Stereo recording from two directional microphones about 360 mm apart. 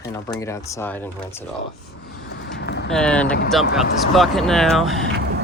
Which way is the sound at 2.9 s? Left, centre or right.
Centre.